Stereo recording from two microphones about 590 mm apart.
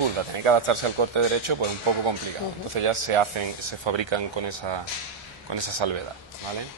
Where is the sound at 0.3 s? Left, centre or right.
Right.